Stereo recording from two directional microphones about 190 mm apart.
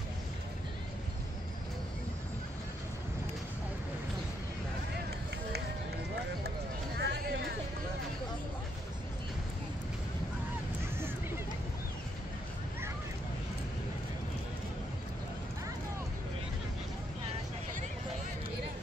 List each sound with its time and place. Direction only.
7.0 s music: 60° right (ahead or behind)